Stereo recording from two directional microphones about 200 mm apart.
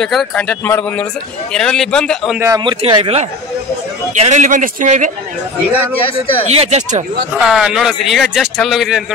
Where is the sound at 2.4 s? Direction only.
20° right (ahead or behind); by 5.1 s 40° right (ahead or behind).